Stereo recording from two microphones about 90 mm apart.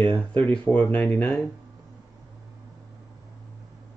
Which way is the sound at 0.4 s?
10° left (ahead or behind).